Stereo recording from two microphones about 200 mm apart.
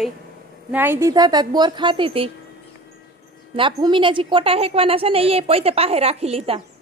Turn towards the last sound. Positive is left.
turn(degrees=-30)  # may be behind; listen again after turning